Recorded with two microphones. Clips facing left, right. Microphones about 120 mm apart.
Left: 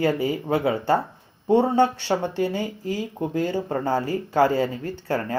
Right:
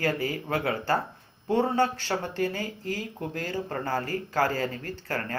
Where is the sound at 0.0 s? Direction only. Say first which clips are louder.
Left 6 dB; 15° left (ahead or behind).